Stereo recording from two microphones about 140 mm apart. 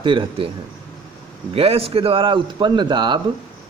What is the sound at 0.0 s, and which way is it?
Speech, 35° right (ahead or behind).